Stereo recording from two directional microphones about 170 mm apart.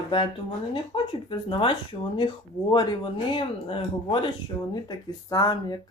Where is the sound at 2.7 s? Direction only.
30° left (ahead or behind).